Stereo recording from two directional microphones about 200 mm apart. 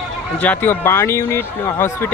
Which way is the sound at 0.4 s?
10° left (ahead or behind).